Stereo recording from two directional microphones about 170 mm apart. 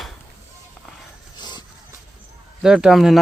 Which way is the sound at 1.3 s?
25° left (ahead or behind).